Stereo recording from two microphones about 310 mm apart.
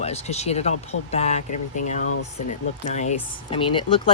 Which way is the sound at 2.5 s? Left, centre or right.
Left.